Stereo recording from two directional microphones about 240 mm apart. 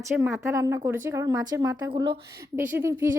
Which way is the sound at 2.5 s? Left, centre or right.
Centre.